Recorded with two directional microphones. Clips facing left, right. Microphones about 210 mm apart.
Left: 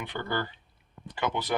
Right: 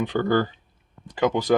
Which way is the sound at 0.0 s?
45° right (ahead or behind).